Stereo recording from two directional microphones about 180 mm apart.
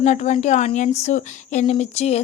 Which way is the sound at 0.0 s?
40° left (ahead or behind).